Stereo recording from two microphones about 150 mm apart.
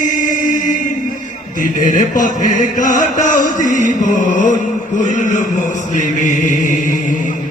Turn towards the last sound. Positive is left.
turn(degrees=60)  # may be behind; listen again after turning